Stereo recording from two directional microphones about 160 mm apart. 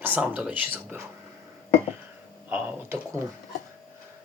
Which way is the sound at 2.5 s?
10° right (ahead or behind).